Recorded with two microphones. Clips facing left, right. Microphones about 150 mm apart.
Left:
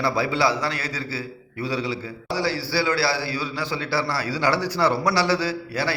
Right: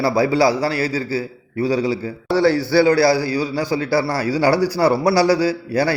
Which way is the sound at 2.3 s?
60° right (ahead or behind).